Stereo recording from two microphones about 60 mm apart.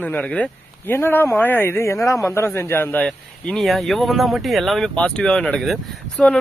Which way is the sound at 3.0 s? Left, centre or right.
Centre.